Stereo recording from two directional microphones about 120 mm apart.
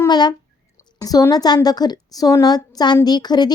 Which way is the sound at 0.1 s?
35° left (ahead or behind).